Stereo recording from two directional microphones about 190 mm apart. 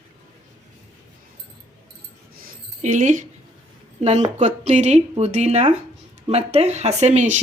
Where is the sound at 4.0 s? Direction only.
35° right (ahead or behind).